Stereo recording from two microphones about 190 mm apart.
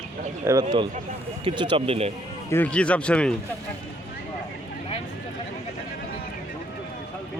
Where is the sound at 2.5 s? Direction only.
10° left (ahead or behind).